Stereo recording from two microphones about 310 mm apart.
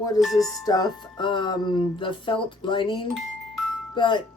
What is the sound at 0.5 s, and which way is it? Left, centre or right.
Speech, centre.